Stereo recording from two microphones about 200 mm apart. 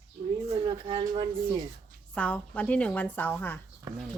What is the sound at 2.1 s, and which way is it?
A woman's voice, 5° left (ahead or behind).